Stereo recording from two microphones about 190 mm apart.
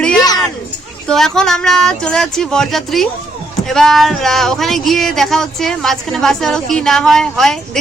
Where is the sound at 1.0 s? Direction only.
Centre (ahead or behind).